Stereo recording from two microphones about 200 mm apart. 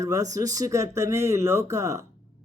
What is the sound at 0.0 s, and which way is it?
Speech, 15° right (ahead or behind).